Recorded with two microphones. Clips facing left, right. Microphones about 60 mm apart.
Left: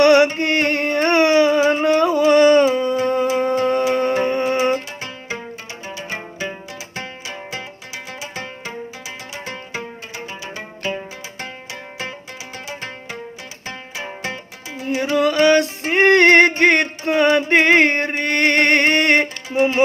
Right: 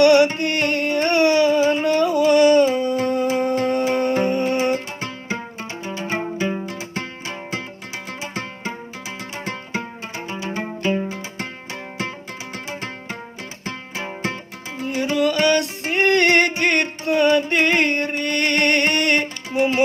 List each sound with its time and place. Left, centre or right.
0.0 s music: left
6.1 s music: right
15.1 s music: left